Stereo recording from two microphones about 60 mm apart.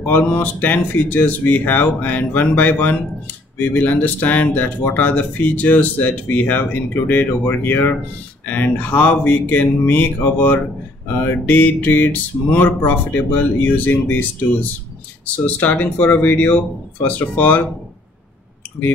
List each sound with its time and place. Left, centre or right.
0.3 s speech: left
11.2 s a sound: left
15.3 s speech: left